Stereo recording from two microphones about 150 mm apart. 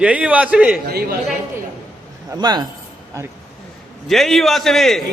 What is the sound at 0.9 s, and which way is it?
Speech, 90° right.